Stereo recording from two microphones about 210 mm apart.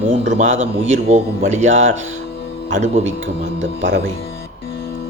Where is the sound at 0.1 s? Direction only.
35° right (ahead or behind).